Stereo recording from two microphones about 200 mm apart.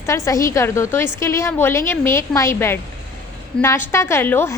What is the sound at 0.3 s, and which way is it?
A woman's voice, 15° left (ahead or behind).